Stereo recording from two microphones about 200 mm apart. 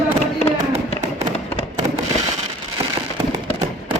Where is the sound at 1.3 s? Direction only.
30° left (ahead or behind).